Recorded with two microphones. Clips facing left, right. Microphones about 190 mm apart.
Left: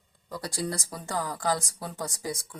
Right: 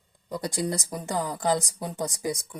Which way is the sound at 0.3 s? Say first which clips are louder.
Right 4 dB; 20° right (ahead or behind).